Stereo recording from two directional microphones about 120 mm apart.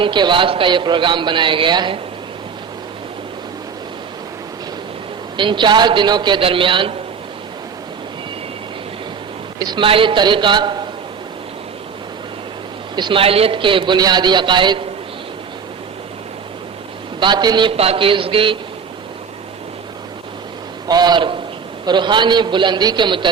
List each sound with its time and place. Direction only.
0.0 s a man's voice: 40° right (ahead or behind)
5.4 s a man's voice: 40° right (ahead or behind)
9.6 s a man's voice: 40° right (ahead or behind)
13.0 s a man's voice: 45° right (ahead or behind)
17.2 s a man's voice: 40° right (ahead or behind)
17.7 s a man's voice: 50° right (ahead or behind)
20.8 s a man's voice: 35° right (ahead or behind)